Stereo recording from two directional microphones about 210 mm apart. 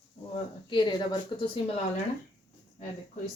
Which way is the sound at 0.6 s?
20° left (ahead or behind).